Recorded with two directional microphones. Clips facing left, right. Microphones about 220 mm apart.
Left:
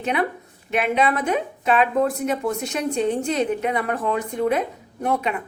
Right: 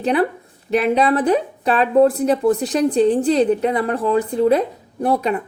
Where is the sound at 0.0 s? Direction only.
35° right (ahead or behind).